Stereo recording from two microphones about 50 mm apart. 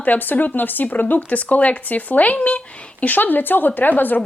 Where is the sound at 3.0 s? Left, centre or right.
Left.